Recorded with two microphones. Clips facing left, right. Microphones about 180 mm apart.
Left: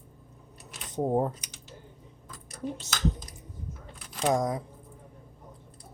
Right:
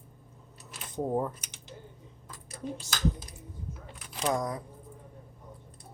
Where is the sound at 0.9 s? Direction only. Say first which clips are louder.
Left 3 dB; 25° left (ahead or behind).